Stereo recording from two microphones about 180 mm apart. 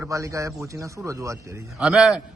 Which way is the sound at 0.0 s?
15° right (ahead or behind).